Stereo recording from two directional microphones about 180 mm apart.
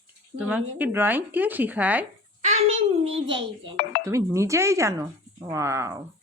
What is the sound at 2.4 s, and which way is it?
Speech, 35° right (ahead or behind).